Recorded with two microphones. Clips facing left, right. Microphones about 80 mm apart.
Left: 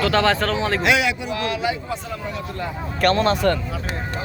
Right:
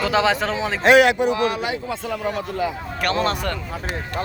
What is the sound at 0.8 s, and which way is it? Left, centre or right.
Speech, right.